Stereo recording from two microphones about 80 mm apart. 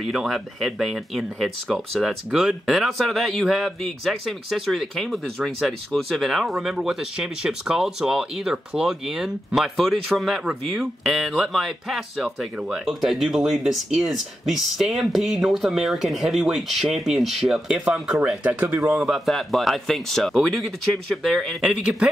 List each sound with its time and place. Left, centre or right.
0.0 s speech: centre
18.4 s speech: centre
18.9 s speech: centre
21.6 s speech: centre